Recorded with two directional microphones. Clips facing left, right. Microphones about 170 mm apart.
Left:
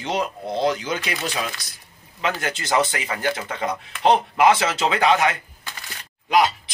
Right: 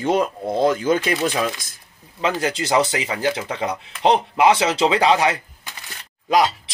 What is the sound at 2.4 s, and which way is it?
Speech, 30° right (ahead or behind).